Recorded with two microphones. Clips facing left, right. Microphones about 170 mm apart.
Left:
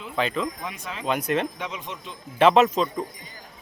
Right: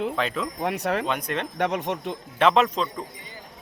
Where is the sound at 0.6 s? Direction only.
70° right (ahead or behind).